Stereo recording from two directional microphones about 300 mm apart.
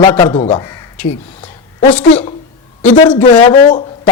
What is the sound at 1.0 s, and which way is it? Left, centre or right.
Speech, centre.